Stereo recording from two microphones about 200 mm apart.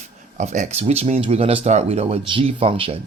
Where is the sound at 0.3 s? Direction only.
35° right (ahead or behind).